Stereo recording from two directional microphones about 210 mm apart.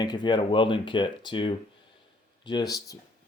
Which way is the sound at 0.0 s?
20° left (ahead or behind).